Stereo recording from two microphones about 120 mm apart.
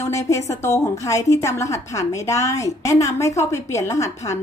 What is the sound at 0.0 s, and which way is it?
A woman's voice, 25° left (ahead or behind).